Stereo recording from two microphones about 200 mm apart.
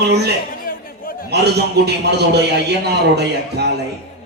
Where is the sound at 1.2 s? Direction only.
55° right (ahead or behind).